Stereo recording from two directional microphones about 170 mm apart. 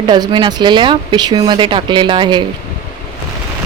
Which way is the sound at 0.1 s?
25° right (ahead or behind).